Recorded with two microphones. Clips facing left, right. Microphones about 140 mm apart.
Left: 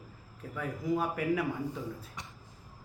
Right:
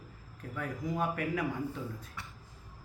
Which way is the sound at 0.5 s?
10° left (ahead or behind).